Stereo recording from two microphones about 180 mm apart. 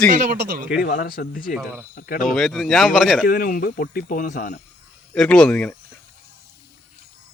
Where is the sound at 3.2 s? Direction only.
50° left (ahead or behind).